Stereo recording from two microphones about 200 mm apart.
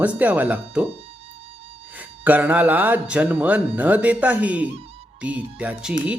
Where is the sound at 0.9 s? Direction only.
30° right (ahead or behind).